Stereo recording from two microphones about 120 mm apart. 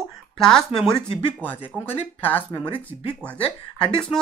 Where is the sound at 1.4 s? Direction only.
15° left (ahead or behind).